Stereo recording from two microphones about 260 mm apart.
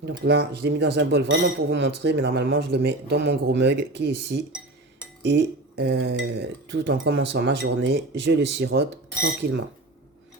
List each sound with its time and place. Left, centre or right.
0.0 s speech: right